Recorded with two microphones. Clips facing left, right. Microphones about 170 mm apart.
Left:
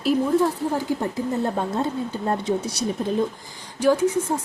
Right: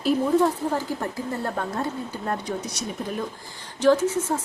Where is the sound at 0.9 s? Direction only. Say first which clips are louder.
Left 4 dB; 20° left (ahead or behind).